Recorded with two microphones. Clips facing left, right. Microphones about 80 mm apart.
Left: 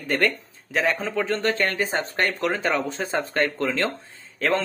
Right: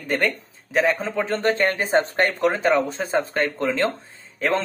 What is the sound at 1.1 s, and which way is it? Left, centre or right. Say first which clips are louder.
Speech: right 2 dB; right.